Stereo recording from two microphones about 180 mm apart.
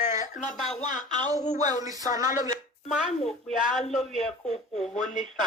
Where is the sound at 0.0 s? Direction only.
40° left (ahead or behind).